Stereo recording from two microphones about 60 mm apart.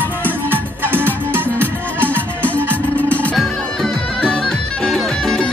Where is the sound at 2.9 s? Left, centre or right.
Left.